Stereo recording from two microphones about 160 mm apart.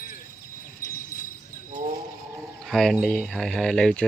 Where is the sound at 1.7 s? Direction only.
55° right (ahead or behind).